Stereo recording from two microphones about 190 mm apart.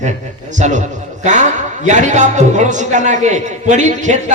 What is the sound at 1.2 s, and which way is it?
A man's voice, 40° right (ahead or behind).